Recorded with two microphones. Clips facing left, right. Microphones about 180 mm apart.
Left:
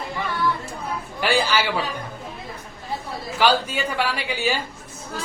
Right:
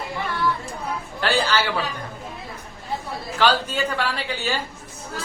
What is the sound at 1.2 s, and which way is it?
Speech, 10° left (ahead or behind).